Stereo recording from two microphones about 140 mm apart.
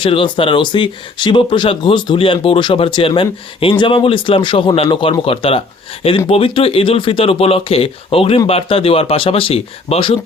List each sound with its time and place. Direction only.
0.0 s speech: 40° left (ahead or behind)